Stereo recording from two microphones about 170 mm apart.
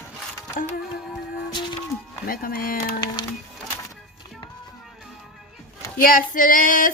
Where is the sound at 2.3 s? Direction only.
55° left (ahead or behind).